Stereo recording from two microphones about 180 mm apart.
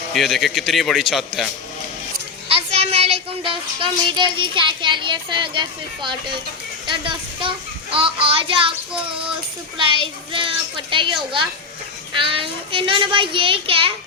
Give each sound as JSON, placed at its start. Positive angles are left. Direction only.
{"t": 0.1, "sound": "a man's voice", "side_deg": 0}
{"t": 2.5, "sound": "a child's voice", "side_deg": -35}